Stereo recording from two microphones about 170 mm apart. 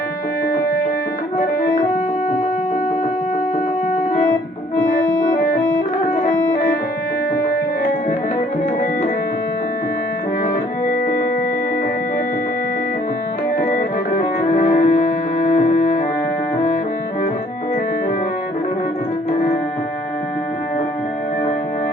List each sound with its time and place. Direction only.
4.9 s organ: 55° left (ahead or behind)
6.1 s music: 45° left (ahead or behind)
13.6 s music: 55° left (ahead or behind)